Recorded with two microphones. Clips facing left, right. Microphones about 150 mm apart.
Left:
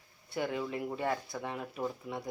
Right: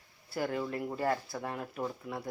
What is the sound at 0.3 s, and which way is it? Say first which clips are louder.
Speech: right 1 dB; centre (ahead or behind).